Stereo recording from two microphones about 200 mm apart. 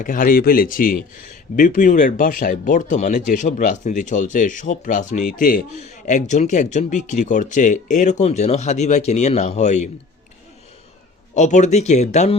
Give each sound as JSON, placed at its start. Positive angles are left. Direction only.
{"t": 0.0, "sound": "speech", "side_deg": 45}
{"t": 11.3, "sound": "speech", "side_deg": 35}